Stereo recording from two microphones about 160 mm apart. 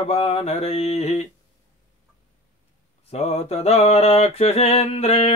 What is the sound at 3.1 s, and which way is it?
Speech, 40° left (ahead or behind).